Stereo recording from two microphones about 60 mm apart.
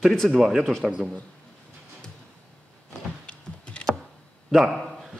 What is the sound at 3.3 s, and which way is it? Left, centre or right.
Computer keyboard, centre.